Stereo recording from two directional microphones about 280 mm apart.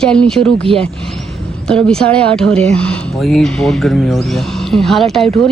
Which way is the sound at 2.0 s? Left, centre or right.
Centre.